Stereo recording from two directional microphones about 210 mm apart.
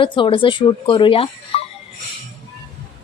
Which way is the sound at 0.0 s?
25° left (ahead or behind).